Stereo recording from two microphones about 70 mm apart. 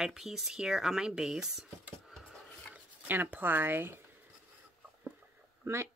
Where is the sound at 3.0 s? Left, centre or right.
Right.